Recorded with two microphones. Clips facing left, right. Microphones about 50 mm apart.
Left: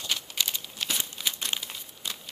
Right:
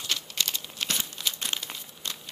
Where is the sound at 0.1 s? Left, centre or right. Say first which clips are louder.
Even; centre.